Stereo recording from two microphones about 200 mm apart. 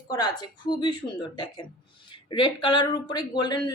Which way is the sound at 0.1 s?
20° left (ahead or behind).